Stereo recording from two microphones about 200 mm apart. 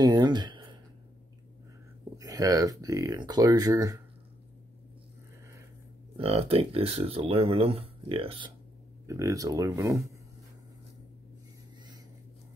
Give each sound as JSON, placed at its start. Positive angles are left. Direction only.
{"t": 0.0, "sound": "a sound", "side_deg": -20}
{"t": 2.1, "sound": "speech", "side_deg": -15}
{"t": 6.1, "sound": "speech", "side_deg": -30}
{"t": 9.0, "sound": "speech", "side_deg": -15}